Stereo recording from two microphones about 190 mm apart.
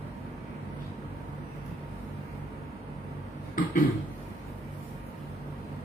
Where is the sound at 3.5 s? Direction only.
50° left (ahead or behind).